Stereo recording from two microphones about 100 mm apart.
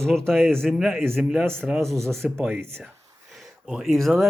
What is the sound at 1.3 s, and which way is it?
Speech, 25° right (ahead or behind).